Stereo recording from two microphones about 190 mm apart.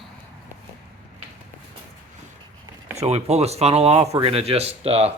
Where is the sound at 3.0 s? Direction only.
35° right (ahead or behind).